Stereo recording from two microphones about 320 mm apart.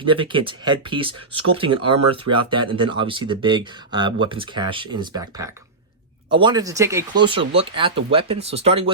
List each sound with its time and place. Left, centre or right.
0.0 s speech: centre